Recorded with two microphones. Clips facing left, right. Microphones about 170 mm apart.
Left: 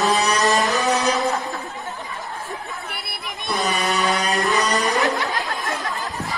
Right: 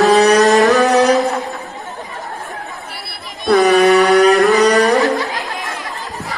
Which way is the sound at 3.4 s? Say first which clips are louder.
Right 13 dB; 55° right (ahead or behind).